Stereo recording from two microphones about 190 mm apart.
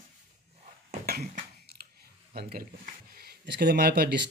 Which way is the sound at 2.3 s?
50° right (ahead or behind).